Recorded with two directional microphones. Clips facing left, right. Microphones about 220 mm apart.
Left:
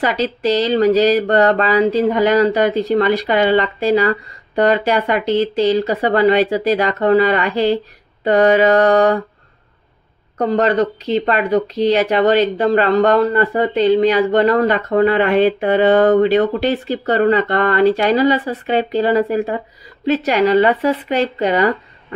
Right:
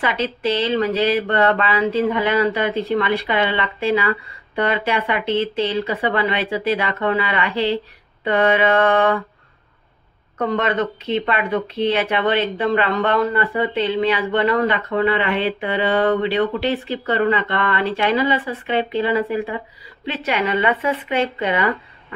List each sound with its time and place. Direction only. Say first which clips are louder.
0.0 s speech: left 4 dB; 40° left (ahead or behind)
10.3 s speech: left 5 dB; 35° left (ahead or behind)